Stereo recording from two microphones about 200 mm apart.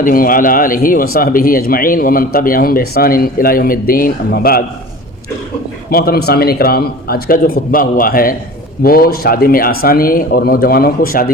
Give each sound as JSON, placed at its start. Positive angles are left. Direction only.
{"t": 0.0, "sound": "speech", "side_deg": 45}
{"t": 5.9, "sound": "speech", "side_deg": 50}